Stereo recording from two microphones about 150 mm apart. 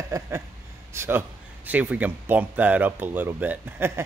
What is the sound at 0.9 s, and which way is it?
Speech, 15° right (ahead or behind).